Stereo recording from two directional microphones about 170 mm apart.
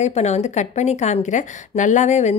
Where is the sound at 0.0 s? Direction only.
40° left (ahead or behind).